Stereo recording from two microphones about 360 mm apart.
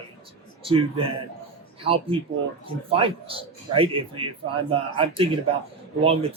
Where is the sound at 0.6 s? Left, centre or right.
Centre.